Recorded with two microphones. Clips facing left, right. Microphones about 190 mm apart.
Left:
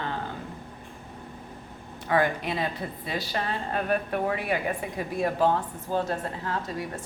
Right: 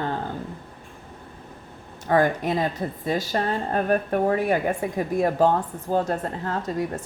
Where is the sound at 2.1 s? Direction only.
45° right (ahead or behind).